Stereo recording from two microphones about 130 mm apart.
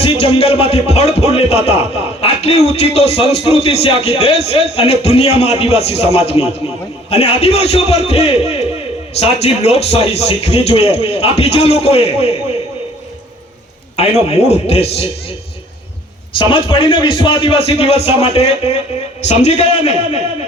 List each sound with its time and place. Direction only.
0.0 s speech: 45° left (ahead or behind)
13.9 s speech: 55° left (ahead or behind)
16.4 s speech: 40° left (ahead or behind)
19.2 s a man's voice: 60° left (ahead or behind)